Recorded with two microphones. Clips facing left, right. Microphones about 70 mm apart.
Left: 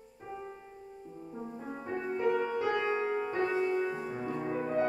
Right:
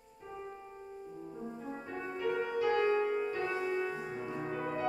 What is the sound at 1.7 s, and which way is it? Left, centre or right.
Music, left.